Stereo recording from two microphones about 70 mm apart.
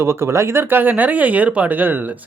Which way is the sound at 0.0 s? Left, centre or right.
Right.